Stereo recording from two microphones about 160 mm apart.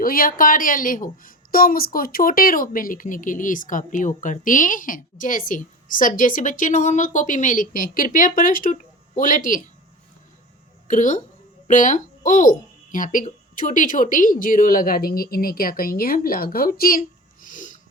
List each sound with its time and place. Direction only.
0.0 s a woman's voice: 65° left (ahead or behind)
10.8 s a woman's voice: 50° left (ahead or behind)
17.4 s wheeze: 55° left (ahead or behind)